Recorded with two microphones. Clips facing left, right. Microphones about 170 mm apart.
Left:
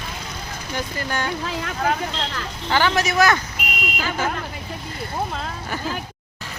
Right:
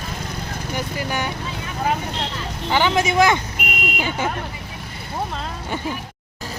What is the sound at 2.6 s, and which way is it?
Speech, 15° right (ahead or behind).